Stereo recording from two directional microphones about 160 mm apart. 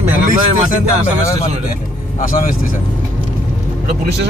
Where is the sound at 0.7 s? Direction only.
55° left (ahead or behind).